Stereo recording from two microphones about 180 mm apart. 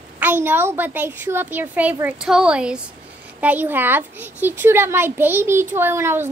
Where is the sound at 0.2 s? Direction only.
10° right (ahead or behind).